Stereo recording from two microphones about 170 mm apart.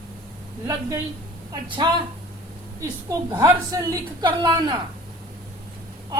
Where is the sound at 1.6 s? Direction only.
30° right (ahead or behind).